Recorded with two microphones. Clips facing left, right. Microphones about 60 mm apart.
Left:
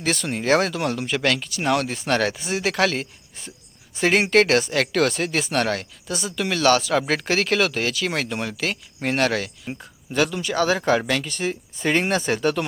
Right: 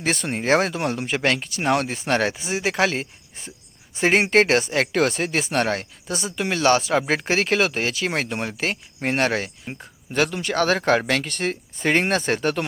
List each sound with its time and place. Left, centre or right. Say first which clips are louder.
0.0 s speech: even; right
2.3 s speech: even; centre
10.1 s speech: even; right